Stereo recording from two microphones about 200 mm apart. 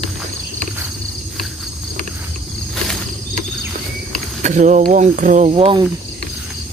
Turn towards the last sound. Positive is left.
turn(degrees=-25)  # may be behind; listen again after turning